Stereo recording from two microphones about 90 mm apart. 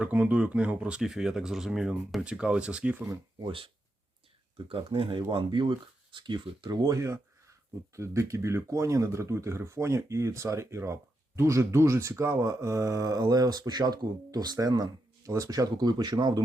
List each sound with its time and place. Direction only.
0.0 s speech: 15° right (ahead or behind)
4.5 s speech: 75° right (ahead or behind)
5.3 s speech: 65° right (ahead or behind)